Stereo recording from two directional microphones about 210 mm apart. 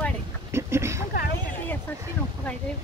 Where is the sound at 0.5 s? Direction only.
15° right (ahead or behind).